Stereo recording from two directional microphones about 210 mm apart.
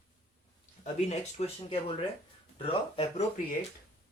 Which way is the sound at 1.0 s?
30° left (ahead or behind).